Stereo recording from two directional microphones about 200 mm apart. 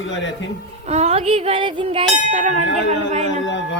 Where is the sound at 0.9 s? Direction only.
30° right (ahead or behind).